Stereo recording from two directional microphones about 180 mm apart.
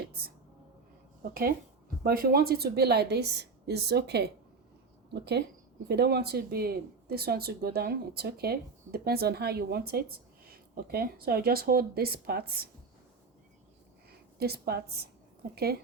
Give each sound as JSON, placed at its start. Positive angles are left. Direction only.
{"t": 1.2, "sound": "speech", "side_deg": -55}
{"t": 14.1, "sound": "a woman's voice", "side_deg": -60}